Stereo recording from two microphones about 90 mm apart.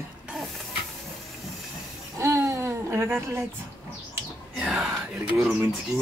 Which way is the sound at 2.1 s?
35° right (ahead or behind).